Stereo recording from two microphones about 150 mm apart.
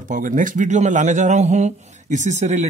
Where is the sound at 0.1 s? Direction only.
60° right (ahead or behind).